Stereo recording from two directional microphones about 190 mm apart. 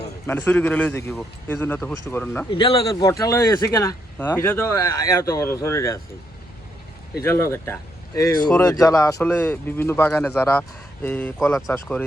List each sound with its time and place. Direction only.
0.3 s speech: 10° left (ahead or behind)
2.5 s speech: 25° left (ahead or behind)
7.5 s speech: 15° left (ahead or behind)